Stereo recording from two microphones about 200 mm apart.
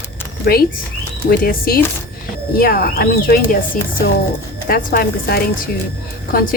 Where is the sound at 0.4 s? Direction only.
50° left (ahead or behind).